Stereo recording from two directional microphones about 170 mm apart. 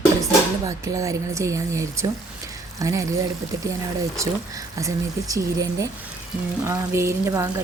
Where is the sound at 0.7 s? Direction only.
20° right (ahead or behind).